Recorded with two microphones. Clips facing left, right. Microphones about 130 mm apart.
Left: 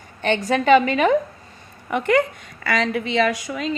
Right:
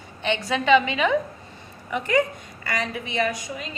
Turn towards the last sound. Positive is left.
turn(degrees=85)